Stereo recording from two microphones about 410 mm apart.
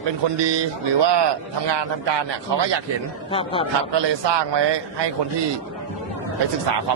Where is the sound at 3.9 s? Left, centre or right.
Right.